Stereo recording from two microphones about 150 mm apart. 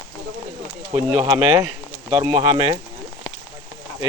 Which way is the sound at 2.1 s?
30° right (ahead or behind).